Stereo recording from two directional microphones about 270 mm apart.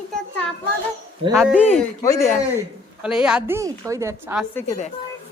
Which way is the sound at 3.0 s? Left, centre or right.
Centre.